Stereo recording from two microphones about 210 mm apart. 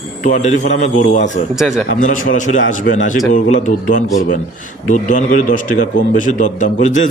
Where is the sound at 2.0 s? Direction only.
40° left (ahead or behind).